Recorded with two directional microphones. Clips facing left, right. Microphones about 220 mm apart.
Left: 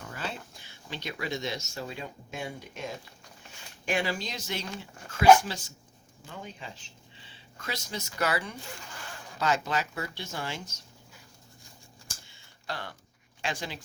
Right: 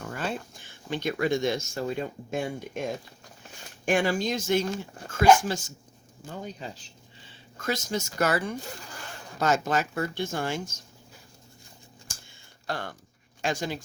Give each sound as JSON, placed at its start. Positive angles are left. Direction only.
{"t": 0.0, "sound": "speech", "side_deg": -50}
{"t": 12.6, "sound": "speech", "side_deg": -45}